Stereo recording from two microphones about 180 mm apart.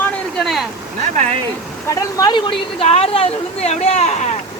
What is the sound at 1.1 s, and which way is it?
Speech, 40° right (ahead or behind).